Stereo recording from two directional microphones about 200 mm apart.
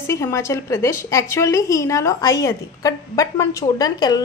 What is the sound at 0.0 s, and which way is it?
A woman's voice, 15° left (ahead or behind).